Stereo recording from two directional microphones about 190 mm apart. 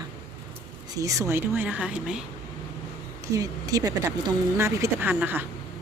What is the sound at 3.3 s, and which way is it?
Speech, 20° right (ahead or behind).